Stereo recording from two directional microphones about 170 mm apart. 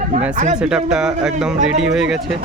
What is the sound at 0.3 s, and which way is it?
Speech, 45° right (ahead or behind).